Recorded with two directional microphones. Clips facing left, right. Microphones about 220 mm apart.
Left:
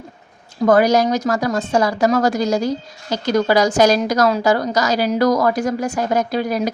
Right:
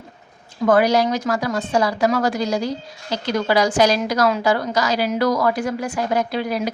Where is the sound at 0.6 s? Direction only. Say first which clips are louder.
Left 2 dB; 40° left (ahead or behind).